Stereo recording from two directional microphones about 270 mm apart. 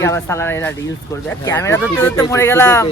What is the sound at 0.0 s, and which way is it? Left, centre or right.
Speech, centre.